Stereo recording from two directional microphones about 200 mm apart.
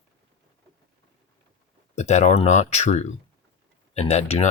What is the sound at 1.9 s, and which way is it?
Speech, 35° left (ahead or behind).